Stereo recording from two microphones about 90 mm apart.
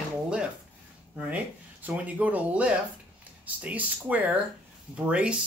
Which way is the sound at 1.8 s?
20° right (ahead or behind).